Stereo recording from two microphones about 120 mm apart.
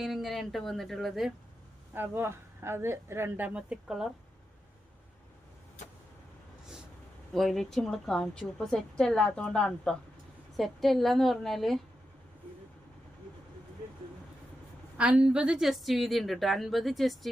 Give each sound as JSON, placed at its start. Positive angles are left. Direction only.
{"t": 0.0, "sound": "a woman's voice", "side_deg": 0}
{"t": 1.9, "sound": "a woman's voice", "side_deg": -20}
{"t": 7.3, "sound": "a woman's voice", "side_deg": 0}
{"t": 14.9, "sound": "a woman's voice", "side_deg": -10}